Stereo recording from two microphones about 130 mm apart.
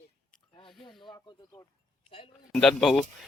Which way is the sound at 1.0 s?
35° left (ahead or behind).